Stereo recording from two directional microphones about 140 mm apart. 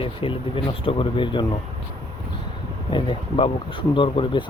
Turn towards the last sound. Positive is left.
turn(degrees=35)  # may be behind; listen again after turning